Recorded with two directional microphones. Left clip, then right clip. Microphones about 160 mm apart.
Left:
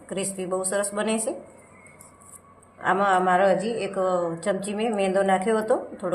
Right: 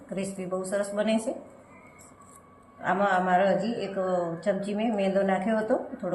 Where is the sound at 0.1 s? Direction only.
90° left.